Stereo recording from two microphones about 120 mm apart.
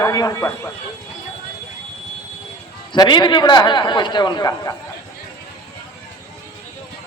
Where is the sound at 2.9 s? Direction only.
40° left (ahead or behind).